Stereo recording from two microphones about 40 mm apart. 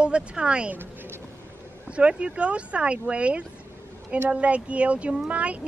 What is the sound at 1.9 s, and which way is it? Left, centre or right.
Speech, right.